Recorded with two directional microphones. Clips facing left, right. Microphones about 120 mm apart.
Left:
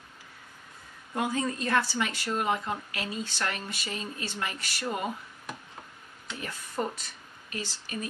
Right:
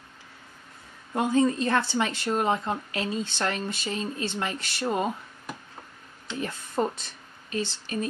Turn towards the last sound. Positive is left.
turn(degrees=-25)  # may be behind; listen again after turning